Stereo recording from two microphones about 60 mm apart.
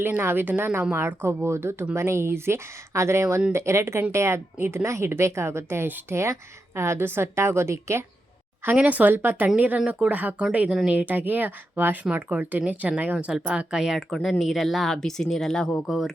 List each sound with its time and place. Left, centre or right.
0.0 s a woman's voice: right
8.7 s a woman's voice: right
10.7 s speech: centre
10.9 s speech: right
13.2 s speech: centre
14.1 s speech: centre
15.9 s speech: centre